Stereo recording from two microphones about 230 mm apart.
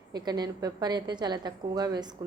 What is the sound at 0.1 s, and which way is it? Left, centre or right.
A woman's voice, centre.